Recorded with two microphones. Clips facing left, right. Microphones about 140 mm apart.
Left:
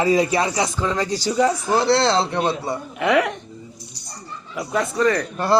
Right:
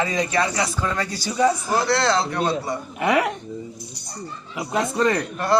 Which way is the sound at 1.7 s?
30° left (ahead or behind).